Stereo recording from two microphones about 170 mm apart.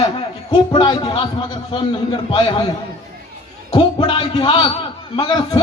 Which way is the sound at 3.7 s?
30° left (ahead or behind).